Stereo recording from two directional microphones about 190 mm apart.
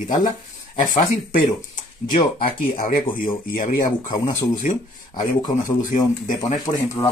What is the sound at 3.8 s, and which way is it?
Speech, 20° left (ahead or behind).